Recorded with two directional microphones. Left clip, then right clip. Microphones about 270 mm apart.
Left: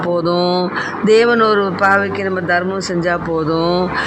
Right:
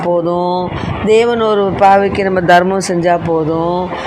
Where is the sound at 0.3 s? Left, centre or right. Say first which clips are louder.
Right 1 dB; left.